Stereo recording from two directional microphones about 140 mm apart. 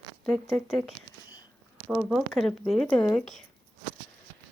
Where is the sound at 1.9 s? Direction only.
5° right (ahead or behind).